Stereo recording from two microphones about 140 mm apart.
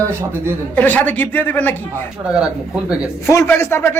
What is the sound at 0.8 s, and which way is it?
Speech, 10° left (ahead or behind).